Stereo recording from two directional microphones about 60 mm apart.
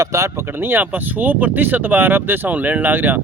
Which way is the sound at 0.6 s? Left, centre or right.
Right.